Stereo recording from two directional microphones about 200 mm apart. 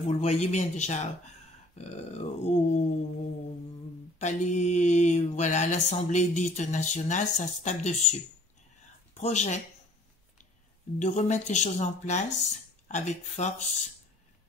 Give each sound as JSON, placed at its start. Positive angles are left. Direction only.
{"t": 0.1, "sound": "speech", "side_deg": 35}
{"t": 4.2, "sound": "speech", "side_deg": 35}
{"t": 11.0, "sound": "speech", "side_deg": 35}